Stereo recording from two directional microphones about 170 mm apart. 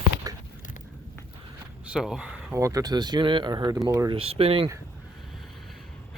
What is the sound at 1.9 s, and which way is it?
Speech, 5° right (ahead or behind).